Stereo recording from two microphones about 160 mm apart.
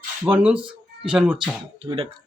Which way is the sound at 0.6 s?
30° right (ahead or behind).